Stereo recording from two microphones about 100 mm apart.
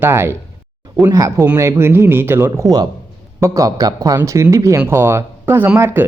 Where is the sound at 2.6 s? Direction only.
40° right (ahead or behind).